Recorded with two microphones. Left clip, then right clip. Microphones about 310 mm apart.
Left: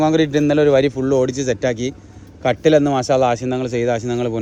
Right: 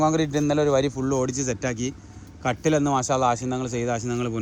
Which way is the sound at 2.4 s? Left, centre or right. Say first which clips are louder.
Left 9 dB; left.